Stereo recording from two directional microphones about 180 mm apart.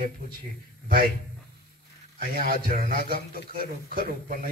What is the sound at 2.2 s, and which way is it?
A man's voice, 55° right (ahead or behind).